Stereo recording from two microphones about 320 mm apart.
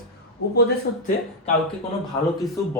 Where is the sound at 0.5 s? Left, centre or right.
Left.